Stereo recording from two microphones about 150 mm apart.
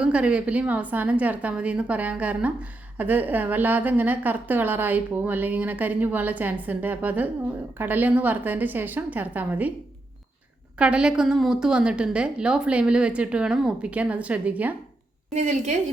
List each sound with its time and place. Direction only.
0.0 s a woman's voice: 5° right (ahead or behind)
10.8 s a woman's voice: 5° right (ahead or behind)
15.3 s a woman's voice: 50° right (ahead or behind)